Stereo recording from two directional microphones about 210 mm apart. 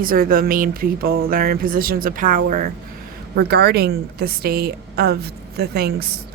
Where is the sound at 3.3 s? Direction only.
50° right (ahead or behind).